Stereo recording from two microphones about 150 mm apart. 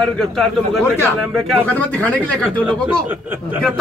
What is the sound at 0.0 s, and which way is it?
A man's voice, centre (ahead or behind).